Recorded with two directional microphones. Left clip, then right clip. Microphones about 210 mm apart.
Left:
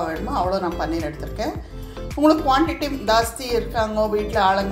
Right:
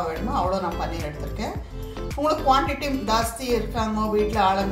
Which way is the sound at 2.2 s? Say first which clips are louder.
Left 3 dB; 45° left (ahead or behind).